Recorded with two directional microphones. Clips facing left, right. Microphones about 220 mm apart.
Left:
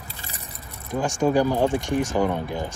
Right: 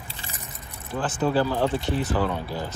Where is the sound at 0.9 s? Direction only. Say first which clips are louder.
Left 3 dB; 15° left (ahead or behind).